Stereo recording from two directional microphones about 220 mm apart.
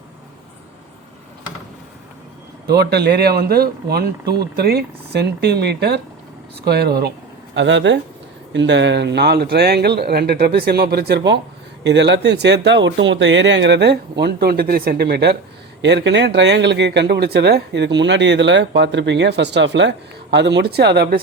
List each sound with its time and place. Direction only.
2.6 s speech: 45° right (ahead or behind)